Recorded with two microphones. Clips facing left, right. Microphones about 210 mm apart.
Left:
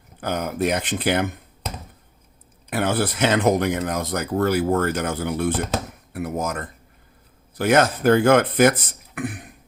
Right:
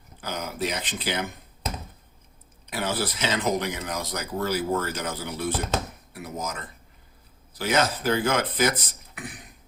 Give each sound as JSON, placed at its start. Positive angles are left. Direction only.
{"t": 0.2, "sound": "speech", "side_deg": 55}
{"t": 2.6, "sound": "speech", "side_deg": 55}